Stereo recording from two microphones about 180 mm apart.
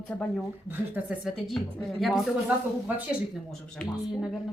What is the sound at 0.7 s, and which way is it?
Speech, 5° right (ahead or behind).